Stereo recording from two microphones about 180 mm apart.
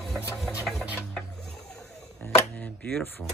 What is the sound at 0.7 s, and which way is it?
Speech, centre (ahead or behind).